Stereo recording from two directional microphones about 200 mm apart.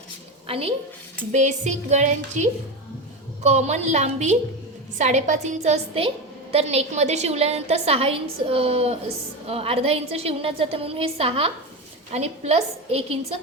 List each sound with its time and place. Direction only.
0.4 s a woman's voice: 30° right (ahead or behind)